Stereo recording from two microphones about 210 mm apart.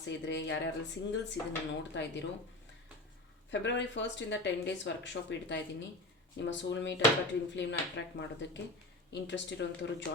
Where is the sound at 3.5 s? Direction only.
60° left (ahead or behind).